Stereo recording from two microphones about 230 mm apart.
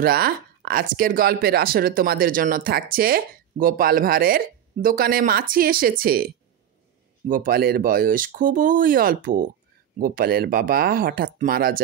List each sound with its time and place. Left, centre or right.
0.0 s speech: right
7.2 s speech: right